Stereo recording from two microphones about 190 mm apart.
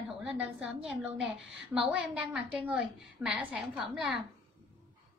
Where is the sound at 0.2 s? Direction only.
5° right (ahead or behind).